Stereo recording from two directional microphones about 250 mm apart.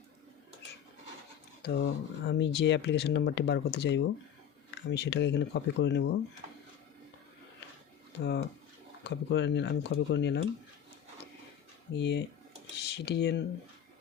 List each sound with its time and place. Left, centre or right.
1.8 s speech: left
8.2 s speech: left
11.9 s speech: left